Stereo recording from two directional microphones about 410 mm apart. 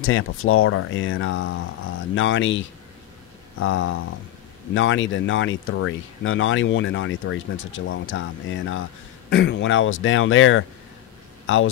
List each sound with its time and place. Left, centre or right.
0.0 s a man's voice: left